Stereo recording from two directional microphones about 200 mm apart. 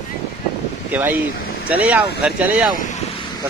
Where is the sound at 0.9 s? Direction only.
10° right (ahead or behind).